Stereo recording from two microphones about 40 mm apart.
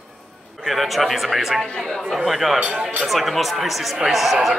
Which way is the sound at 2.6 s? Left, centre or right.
Right.